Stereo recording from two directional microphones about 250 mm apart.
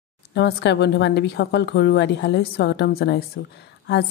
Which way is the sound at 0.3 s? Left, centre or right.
Left.